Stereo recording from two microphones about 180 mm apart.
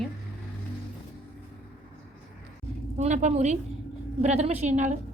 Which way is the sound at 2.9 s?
40° right (ahead or behind).